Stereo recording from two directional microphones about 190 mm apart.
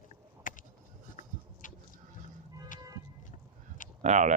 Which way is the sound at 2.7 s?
45° left (ahead or behind).